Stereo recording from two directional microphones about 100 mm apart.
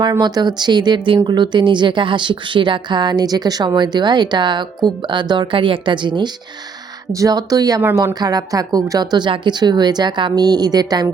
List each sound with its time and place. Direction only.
0.0 s speech: 40° right (ahead or behind)
7.1 s speech: 35° right (ahead or behind)